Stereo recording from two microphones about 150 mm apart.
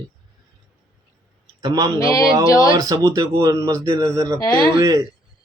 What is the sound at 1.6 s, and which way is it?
Speech, 25° right (ahead or behind).